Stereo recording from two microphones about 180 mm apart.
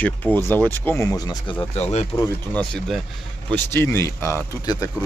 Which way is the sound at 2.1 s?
5° left (ahead or behind).